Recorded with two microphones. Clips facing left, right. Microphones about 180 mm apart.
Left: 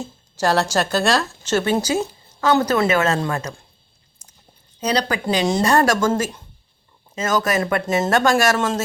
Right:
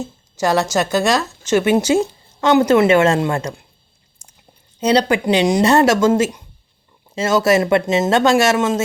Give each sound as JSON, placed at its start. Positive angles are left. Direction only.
{"t": 0.4, "sound": "a woman's voice", "side_deg": -15}
{"t": 4.8, "sound": "speech", "side_deg": -30}